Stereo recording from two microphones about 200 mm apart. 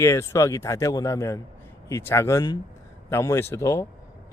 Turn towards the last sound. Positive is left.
turn(degrees=15)  # may be behind; listen again after turning